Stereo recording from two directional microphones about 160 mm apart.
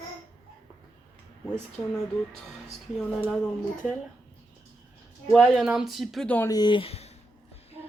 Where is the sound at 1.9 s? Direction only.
5° left (ahead or behind).